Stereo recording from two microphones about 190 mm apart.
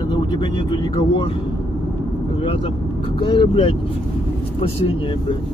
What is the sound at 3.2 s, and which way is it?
Speech, 25° left (ahead or behind).